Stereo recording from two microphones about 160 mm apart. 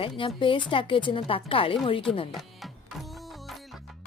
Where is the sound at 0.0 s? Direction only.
35° left (ahead or behind).